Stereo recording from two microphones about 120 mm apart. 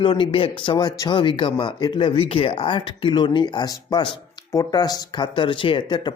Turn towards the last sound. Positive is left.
turn(degrees=40)  # may be behind; listen again after turning